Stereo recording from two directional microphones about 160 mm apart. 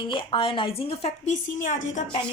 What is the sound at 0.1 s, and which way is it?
A woman's voice, 35° left (ahead or behind).